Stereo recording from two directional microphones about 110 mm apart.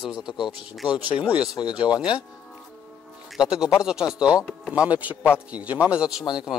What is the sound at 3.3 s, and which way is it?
A man's voice, 5° right (ahead or behind).